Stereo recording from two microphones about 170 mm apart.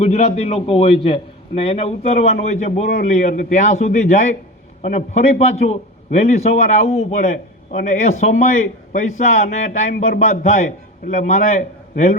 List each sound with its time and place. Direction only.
0.0 s a man's voice: 40° left (ahead or behind)